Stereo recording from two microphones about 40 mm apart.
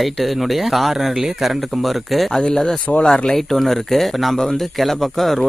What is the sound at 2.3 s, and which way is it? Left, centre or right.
Speech, centre.